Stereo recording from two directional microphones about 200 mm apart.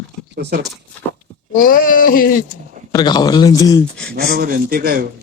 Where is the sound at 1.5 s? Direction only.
45° left (ahead or behind).